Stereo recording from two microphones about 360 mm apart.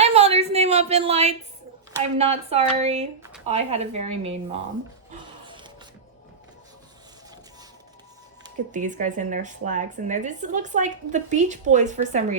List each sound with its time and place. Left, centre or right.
0.0 s a sound: centre
2.1 s speech: centre
8.4 s speech: right